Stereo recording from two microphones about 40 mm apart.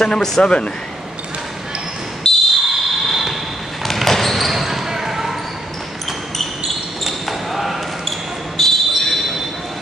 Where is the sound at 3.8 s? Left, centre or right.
Centre.